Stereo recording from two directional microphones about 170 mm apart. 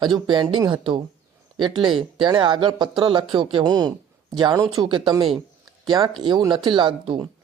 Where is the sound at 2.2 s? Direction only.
30° right (ahead or behind).